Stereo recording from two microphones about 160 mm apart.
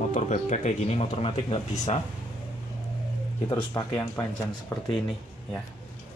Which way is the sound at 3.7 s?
20° left (ahead or behind).